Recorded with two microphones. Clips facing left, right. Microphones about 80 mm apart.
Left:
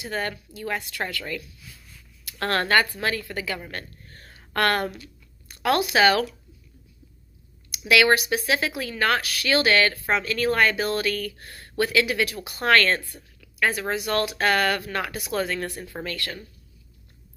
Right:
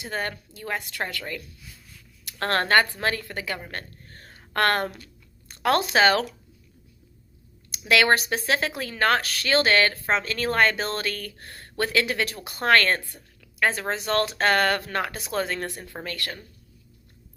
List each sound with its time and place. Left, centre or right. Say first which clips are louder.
0.0 s a woman's voice: left 1 dB; right
7.7 s speech: left 1 dB; right